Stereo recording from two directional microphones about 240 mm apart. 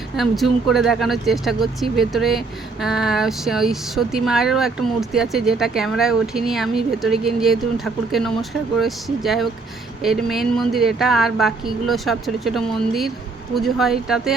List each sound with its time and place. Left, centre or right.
0.2 s speech: centre